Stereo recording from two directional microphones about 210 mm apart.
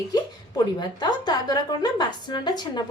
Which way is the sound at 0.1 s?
20° left (ahead or behind).